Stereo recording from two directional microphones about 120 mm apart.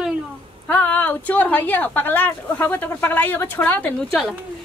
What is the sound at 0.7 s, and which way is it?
Speech, 15° left (ahead or behind).